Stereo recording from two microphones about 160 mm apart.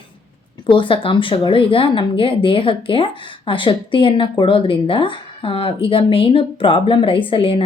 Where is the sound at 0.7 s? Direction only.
30° left (ahead or behind).